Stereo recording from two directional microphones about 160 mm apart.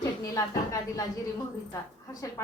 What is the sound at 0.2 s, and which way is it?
Speech, 20° left (ahead or behind).